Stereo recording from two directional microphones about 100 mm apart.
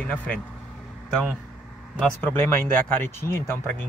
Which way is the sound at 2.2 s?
20° left (ahead or behind).